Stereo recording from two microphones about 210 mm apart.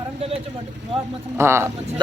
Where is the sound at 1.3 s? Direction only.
10° right (ahead or behind).